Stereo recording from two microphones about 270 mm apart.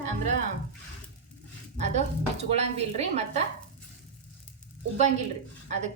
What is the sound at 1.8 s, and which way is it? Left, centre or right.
A woman's voice, right.